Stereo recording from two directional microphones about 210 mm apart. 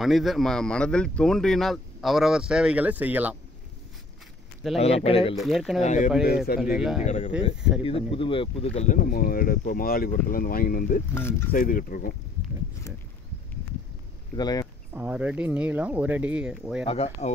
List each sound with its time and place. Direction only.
0.0 s speech: centre (ahead or behind)
4.7 s speech: 30° left (ahead or behind)
5.4 s speech: centre (ahead or behind)
5.8 s speech: 35° left (ahead or behind)
6.6 s speech: 5° right (ahead or behind)
7.1 s speech: 30° left (ahead or behind)
11.1 s speech: 10° left (ahead or behind)
11.5 s speech: 40° left (ahead or behind)
14.3 s speech: 20° left (ahead or behind)
15.0 s speech: 5° right (ahead or behind)
16.8 s speech: 30° left (ahead or behind)